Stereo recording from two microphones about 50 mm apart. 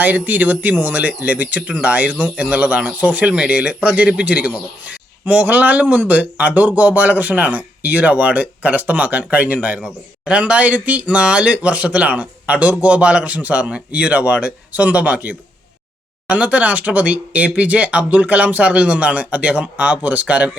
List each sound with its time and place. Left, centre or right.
0.0 s speech: right
9.8 s speech: centre